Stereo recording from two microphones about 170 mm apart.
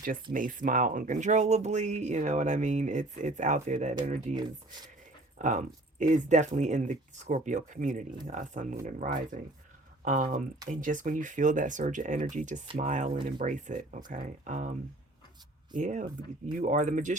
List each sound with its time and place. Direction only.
0.3 s speech: 50° right (ahead or behind)
4.4 s speech: 25° right (ahead or behind)
5.4 s speech: 50° right (ahead or behind)